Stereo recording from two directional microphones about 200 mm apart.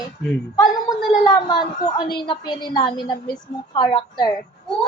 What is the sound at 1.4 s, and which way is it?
A woman's voice, 20° left (ahead or behind).